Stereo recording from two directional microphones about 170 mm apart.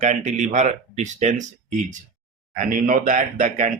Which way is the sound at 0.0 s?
45° right (ahead or behind).